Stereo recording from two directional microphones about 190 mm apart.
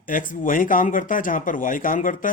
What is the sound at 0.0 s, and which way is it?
Speech, 45° left (ahead or behind).